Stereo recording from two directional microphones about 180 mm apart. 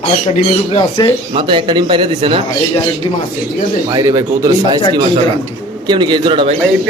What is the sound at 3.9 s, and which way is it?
Speech, 20° right (ahead or behind).